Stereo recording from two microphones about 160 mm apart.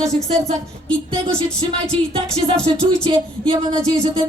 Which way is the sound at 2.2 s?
35° right (ahead or behind).